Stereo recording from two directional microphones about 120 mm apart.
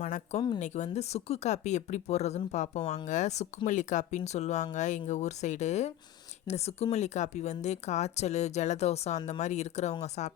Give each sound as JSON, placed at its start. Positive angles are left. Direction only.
{"t": 0.0, "sound": "speech", "side_deg": 75}
{"t": 3.1, "sound": "speech", "side_deg": 80}
{"t": 6.5, "sound": "speech", "side_deg": 60}
{"t": 6.9, "sound": "speech", "side_deg": 75}